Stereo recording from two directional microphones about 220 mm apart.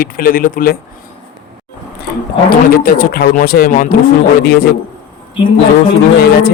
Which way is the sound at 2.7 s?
45° left (ahead or behind).